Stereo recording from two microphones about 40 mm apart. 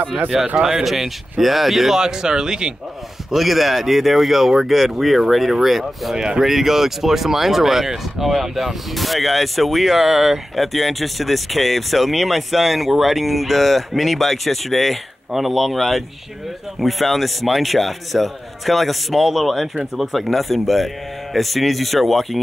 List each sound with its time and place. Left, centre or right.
0.6 s speech: centre
2.0 s speech: centre
3.3 s speech: centre
6.1 s speech: right
6.4 s speech: centre